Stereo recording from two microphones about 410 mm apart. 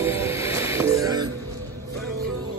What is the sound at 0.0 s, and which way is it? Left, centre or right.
Music, centre.